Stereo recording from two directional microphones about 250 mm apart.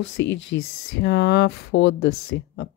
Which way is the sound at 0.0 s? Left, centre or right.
Left.